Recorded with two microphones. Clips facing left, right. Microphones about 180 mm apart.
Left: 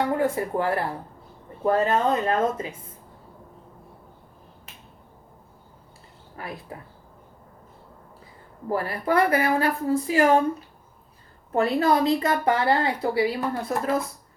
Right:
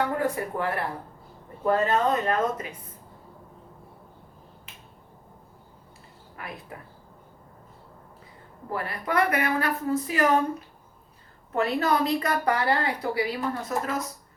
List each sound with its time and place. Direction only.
0.2 s a woman's voice: 25° left (ahead or behind)
6.3 s a woman's voice: 30° left (ahead or behind)
8.7 s a woman's voice: 35° left (ahead or behind)
11.5 s a woman's voice: 30° left (ahead or behind)